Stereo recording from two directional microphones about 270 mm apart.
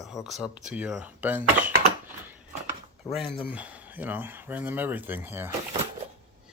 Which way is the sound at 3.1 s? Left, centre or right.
Centre.